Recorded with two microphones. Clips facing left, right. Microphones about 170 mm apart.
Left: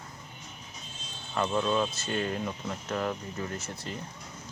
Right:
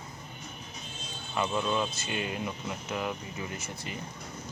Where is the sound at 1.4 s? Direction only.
10° right (ahead or behind).